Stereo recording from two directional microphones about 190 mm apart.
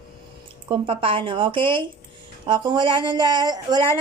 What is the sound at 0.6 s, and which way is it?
A woman's voice, 30° right (ahead or behind).